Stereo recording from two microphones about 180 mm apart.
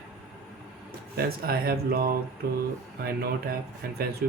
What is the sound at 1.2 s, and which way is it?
Speech, 55° right (ahead or behind).